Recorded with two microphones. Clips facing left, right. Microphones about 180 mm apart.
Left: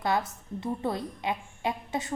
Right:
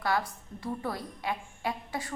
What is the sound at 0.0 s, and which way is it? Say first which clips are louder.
A woman's voice: left 2 dB; 20° left (ahead or behind).